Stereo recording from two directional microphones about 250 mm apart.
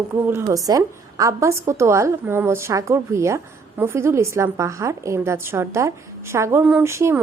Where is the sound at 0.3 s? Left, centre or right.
Centre.